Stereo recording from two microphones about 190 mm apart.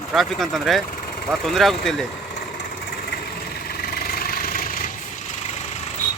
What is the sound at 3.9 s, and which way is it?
Vehicle, 50° left (ahead or behind).